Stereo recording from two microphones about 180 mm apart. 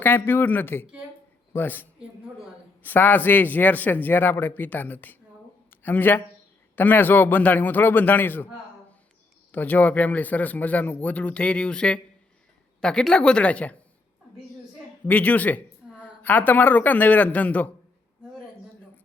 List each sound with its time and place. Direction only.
0.0 s a man's voice: 10° left (ahead or behind)
9.5 s a man's voice: 10° left (ahead or behind)
15.0 s a man's voice: 10° left (ahead or behind)